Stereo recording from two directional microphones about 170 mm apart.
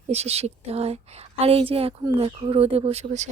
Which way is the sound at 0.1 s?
40° right (ahead or behind).